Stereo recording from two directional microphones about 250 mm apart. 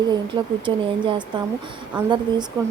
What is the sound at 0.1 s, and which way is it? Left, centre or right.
Speech, centre.